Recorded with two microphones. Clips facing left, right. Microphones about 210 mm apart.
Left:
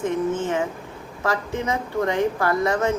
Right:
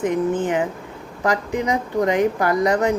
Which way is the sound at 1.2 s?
15° right (ahead or behind).